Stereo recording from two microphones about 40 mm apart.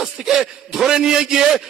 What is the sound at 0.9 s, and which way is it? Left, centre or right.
Speech, centre.